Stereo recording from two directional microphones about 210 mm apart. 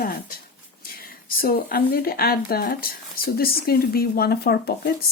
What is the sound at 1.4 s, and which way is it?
Speech, 45° left (ahead or behind).